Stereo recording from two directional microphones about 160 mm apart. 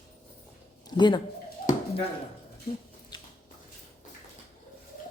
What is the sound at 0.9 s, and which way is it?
Speech, 30° left (ahead or behind).